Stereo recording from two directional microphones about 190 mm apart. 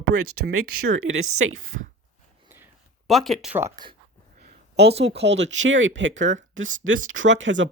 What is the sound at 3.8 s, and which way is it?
Speech, 20° right (ahead or behind).